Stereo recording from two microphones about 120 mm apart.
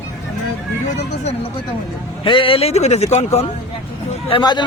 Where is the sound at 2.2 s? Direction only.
50° left (ahead or behind); by 3.5 s 65° left (ahead or behind).